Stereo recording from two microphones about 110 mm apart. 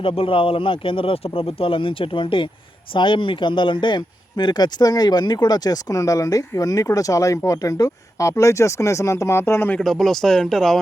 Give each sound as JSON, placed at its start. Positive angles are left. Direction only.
{"t": 0.0, "sound": "speech", "side_deg": 55}
{"t": 9.7, "sound": "speech", "side_deg": 5}